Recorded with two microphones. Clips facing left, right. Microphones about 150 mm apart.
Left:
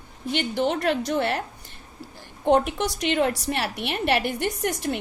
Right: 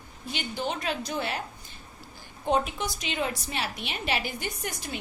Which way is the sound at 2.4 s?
70° left (ahead or behind).